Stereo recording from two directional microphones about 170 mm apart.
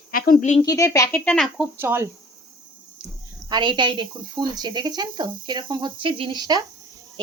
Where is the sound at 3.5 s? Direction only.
25° right (ahead or behind).